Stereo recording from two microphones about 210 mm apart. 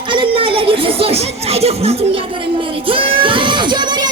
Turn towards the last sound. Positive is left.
turn(degrees=-20)  # may be behind; listen again after turning